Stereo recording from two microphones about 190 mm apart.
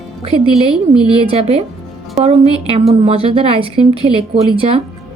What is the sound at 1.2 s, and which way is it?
A woman's voice, 30° right (ahead or behind).